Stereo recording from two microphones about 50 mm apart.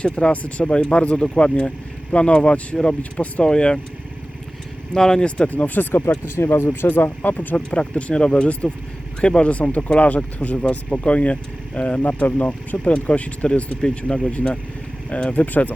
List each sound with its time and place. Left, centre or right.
0.0 s speech: left
3.4 s speech: centre
4.9 s speech: centre
5.5 s speech: left
6.2 s speech: left